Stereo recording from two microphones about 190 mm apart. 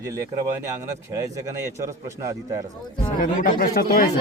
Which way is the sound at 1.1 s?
15° right (ahead or behind).